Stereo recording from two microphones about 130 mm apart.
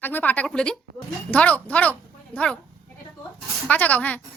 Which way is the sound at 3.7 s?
10° left (ahead or behind).